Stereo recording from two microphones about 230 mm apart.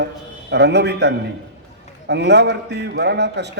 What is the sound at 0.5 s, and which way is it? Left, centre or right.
A man's voice, right.